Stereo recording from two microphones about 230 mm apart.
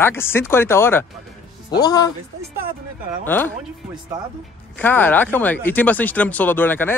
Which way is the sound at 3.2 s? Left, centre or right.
Centre.